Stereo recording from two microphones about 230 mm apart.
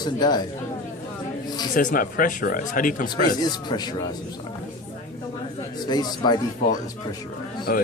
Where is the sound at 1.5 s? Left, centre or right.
Centre.